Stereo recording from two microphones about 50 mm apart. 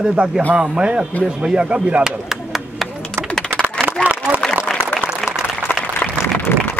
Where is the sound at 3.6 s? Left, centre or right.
Right.